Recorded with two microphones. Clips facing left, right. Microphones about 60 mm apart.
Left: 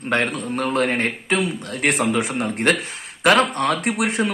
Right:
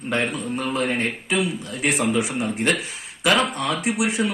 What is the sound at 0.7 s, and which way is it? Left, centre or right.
Speech, left.